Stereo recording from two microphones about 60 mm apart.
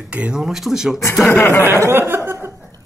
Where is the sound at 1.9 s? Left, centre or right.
Right.